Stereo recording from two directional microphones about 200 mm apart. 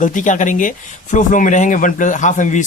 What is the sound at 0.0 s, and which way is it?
Speech, 40° left (ahead or behind).